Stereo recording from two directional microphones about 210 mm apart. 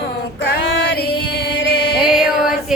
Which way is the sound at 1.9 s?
5° right (ahead or behind).